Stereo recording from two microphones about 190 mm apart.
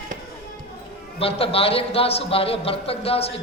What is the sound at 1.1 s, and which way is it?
A man's voice, 30° left (ahead or behind).